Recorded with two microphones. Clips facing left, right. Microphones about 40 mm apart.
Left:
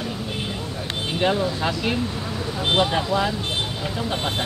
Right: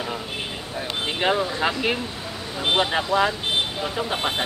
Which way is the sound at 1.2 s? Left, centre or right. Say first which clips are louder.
Even; centre.